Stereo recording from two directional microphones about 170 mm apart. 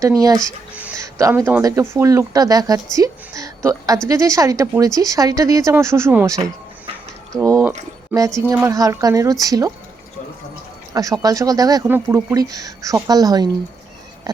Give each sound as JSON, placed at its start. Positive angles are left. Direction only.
{"t": 0.0, "sound": "speech", "side_deg": -20}
{"t": 0.7, "sound": "speech", "side_deg": -10}
{"t": 1.0, "sound": "speech", "side_deg": -20}
{"t": 8.7, "sound": "speech", "side_deg": -20}
{"t": 10.9, "sound": "speech", "side_deg": -20}